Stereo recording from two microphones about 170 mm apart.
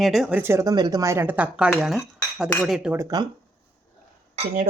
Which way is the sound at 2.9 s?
20° right (ahead or behind).